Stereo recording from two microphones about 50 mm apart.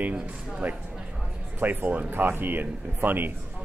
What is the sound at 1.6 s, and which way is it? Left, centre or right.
Speech, right.